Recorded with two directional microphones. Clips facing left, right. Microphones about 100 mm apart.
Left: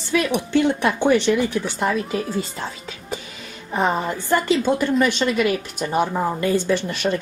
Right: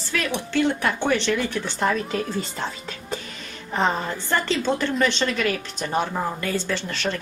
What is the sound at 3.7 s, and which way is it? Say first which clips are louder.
A woman's voice: left 2 dB; 15° left (ahead or behind).